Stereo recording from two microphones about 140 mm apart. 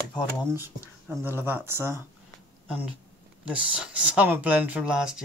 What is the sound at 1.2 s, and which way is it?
Speech, 15° right (ahead or behind).